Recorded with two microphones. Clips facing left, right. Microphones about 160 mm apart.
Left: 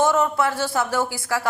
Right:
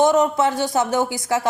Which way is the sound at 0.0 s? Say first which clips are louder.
Right 3 dB; 20° right (ahead or behind).